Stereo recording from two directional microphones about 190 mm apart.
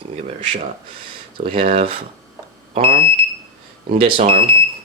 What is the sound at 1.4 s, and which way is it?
Speech, 45° right (ahead or behind).